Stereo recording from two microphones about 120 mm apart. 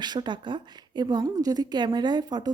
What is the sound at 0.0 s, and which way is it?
A woman's voice, 40° right (ahead or behind).